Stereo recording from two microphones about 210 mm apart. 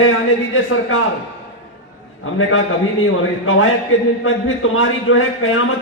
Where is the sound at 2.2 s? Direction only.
70° left (ahead or behind).